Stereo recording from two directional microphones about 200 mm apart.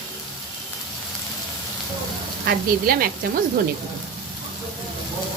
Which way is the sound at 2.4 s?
45° right (ahead or behind).